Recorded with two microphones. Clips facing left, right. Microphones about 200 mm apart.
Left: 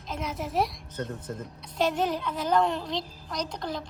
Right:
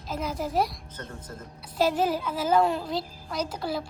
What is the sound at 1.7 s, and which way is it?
A woman's voice, 5° right (ahead or behind).